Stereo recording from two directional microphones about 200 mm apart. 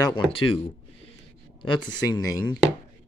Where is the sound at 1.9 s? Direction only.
20° left (ahead or behind).